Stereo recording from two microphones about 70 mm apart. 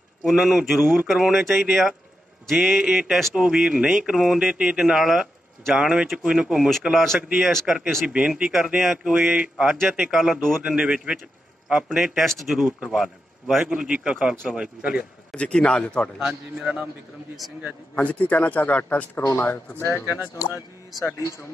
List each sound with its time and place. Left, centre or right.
0.2 s speech: centre
7.2 s speech: centre
7.4 s speech: centre
8.1 s speech: centre
10.1 s speech: centre
10.6 s speech: centre
12.2 s speech: centre
13.0 s a man's voice: centre
13.7 s speech: centre
15.3 s a man's voice: centre
16.3 s a man's voice: centre
17.9 s a man's voice: left
19.8 s speech: left